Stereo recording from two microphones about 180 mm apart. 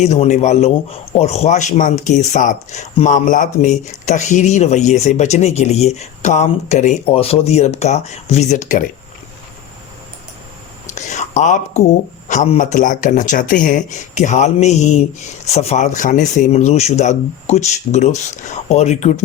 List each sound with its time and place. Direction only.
0.0 s speech: 40° left (ahead or behind)
10.8 s whispering: 40° left (ahead or behind)
12.3 s speech: 40° left (ahead or behind)